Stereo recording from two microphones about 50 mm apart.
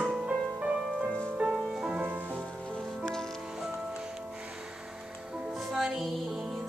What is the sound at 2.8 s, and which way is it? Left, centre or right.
Music, centre.